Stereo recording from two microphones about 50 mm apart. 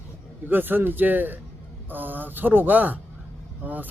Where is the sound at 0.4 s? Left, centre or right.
Right.